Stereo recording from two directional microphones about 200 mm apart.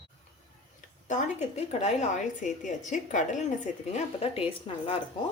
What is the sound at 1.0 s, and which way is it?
A woman's voice, 35° left (ahead or behind).